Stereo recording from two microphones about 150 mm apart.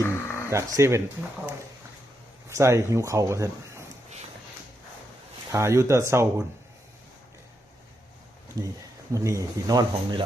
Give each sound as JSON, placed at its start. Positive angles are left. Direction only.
{"t": 0.0, "sound": "a sound", "side_deg": 20}
{"t": 0.5, "sound": "speech", "side_deg": -20}
{"t": 2.5, "sound": "speech", "side_deg": -20}
{"t": 5.5, "sound": "speech", "side_deg": -20}
{"t": 9.1, "sound": "speech", "side_deg": -20}